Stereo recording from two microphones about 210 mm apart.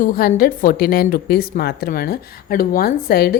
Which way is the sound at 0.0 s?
45° left (ahead or behind).